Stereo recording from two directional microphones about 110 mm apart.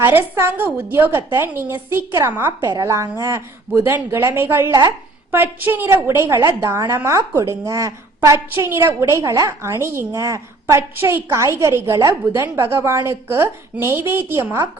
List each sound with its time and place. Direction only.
0.0 s a woman's voice: 20° right (ahead or behind)
2.6 s a woman's voice: 30° right (ahead or behind)